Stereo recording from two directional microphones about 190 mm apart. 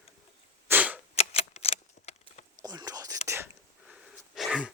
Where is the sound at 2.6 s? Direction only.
20° right (ahead or behind).